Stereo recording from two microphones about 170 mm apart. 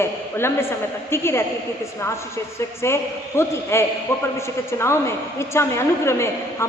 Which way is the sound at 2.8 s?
15° left (ahead or behind).